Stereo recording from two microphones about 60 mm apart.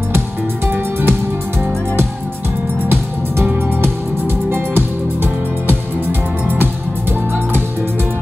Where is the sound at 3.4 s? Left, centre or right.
Right.